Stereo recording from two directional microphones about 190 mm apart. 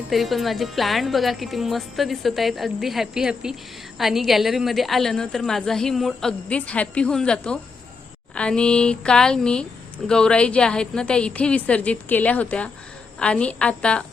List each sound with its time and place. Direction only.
0.1 s a woman's voice: centre (ahead or behind)